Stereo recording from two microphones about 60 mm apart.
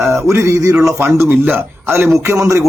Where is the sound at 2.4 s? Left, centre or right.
Right.